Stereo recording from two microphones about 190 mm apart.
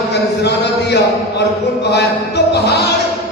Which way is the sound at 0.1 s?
65° left (ahead or behind).